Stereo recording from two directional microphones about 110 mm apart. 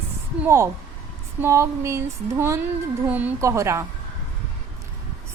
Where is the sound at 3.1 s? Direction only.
15° right (ahead or behind).